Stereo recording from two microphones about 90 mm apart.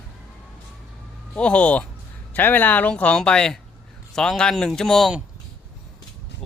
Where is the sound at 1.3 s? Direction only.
10° left (ahead or behind).